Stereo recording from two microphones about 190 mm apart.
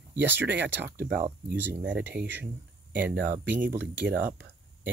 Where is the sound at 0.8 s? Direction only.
55° right (ahead or behind).